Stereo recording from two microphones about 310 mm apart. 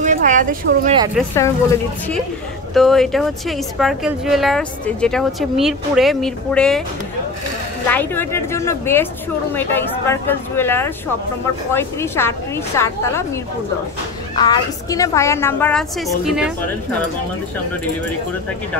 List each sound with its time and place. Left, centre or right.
0.0 s a sound: right
1.1 s a woman's voice: centre
2.7 s a woman's voice: centre
7.9 s a woman's voice: centre
14.3 s a woman's voice: centre